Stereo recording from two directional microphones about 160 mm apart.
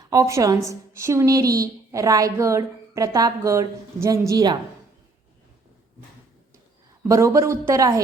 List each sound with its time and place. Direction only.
0.1 s a woman's voice: 20° right (ahead or behind)
7.1 s a woman's voice: 20° right (ahead or behind)